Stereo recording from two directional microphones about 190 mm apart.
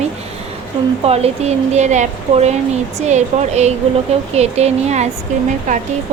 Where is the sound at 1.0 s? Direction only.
30° right (ahead or behind).